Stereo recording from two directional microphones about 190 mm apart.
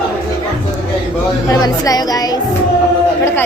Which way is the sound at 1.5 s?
20° left (ahead or behind).